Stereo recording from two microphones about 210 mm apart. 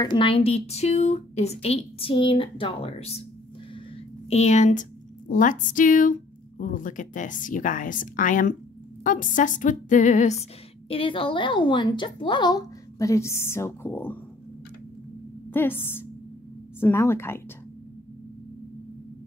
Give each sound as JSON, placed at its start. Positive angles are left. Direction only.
{"t": 0.0, "sound": "a woman's voice", "side_deg": 20}
{"t": 4.3, "sound": "a woman's voice", "side_deg": 30}
{"t": 15.5, "sound": "a woman's voice", "side_deg": 10}